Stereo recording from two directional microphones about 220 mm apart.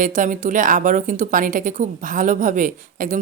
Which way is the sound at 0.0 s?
35° right (ahead or behind).